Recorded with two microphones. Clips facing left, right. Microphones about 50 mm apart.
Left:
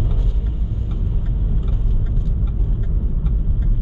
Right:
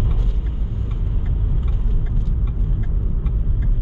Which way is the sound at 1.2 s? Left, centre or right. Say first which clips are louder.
Left 1 dB; centre.